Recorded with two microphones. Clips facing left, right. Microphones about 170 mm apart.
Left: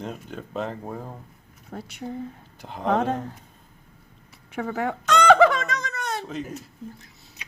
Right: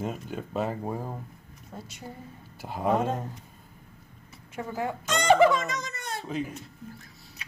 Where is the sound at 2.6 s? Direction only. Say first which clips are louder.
Right 2 dB; 5° right (ahead or behind).